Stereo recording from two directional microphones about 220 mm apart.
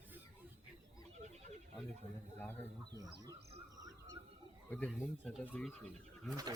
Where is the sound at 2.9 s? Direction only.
15° right (ahead or behind).